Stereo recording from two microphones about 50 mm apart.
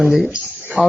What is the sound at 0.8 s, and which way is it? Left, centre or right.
Speech, centre.